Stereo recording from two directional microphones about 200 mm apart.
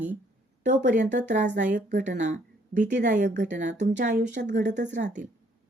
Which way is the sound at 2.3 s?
40° right (ahead or behind).